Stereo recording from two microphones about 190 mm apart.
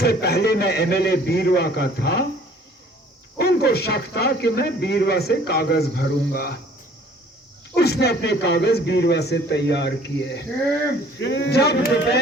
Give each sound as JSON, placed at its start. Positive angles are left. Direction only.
{"t": 0.0, "sound": "speech", "side_deg": 55}
{"t": 3.3, "sound": "speech", "side_deg": 55}
{"t": 7.8, "sound": "speech", "side_deg": 60}